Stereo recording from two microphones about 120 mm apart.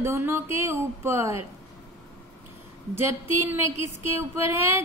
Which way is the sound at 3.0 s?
20° right (ahead or behind).